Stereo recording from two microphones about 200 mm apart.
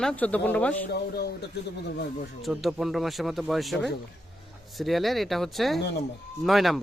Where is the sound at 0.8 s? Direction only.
50° left (ahead or behind).